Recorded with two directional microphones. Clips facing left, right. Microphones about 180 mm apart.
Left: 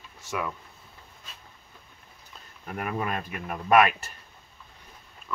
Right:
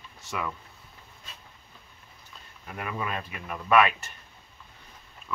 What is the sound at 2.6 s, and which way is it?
Speech, 45° left (ahead or behind).